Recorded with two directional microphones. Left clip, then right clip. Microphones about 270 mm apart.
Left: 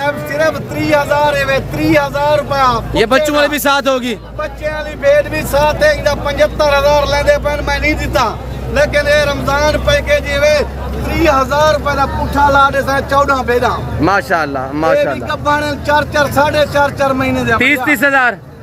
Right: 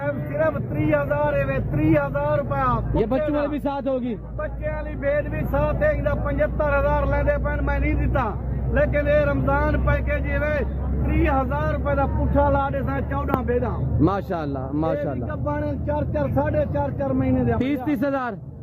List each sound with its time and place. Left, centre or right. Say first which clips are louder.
0.0 s speech: left 9 dB; centre